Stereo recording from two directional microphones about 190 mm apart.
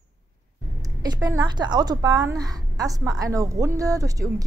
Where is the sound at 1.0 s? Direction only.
20° right (ahead or behind).